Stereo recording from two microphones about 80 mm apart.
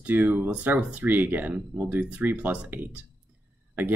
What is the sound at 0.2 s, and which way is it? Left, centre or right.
Speech, right.